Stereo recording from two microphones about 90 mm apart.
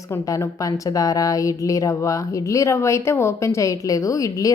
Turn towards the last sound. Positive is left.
turn(degrees=40)  # may be behind; listen again after turning